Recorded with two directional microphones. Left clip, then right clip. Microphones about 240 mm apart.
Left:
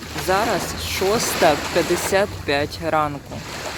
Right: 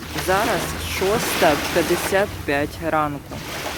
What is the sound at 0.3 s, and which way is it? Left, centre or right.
Speech, centre.